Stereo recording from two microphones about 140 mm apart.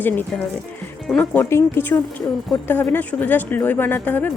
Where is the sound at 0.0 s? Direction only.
15° left (ahead or behind).